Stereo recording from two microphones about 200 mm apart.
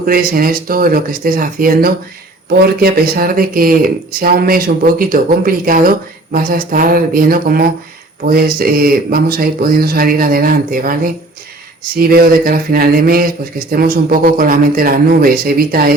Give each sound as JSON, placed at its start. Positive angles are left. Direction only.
{"t": 0.0, "sound": "speech", "side_deg": -45}